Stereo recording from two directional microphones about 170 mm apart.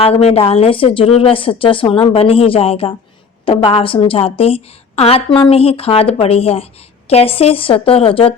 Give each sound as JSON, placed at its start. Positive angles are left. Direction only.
{"t": 0.0, "sound": "a woman's voice", "side_deg": 35}